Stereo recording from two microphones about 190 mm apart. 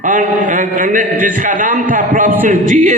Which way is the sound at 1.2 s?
45° right (ahead or behind).